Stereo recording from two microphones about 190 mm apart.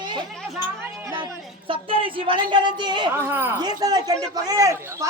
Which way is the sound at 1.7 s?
30° right (ahead or behind).